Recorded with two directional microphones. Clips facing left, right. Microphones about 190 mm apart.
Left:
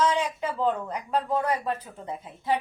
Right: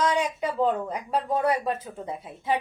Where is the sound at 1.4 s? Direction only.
15° right (ahead or behind).